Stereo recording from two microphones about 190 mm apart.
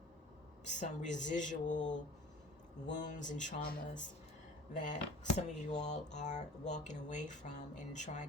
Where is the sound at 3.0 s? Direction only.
40° left (ahead or behind).